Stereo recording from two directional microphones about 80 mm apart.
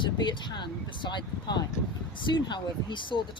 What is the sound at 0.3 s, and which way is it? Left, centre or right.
Speech, left.